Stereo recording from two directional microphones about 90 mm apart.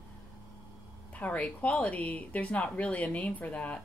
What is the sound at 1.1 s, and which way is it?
Speech, 15° left (ahead or behind).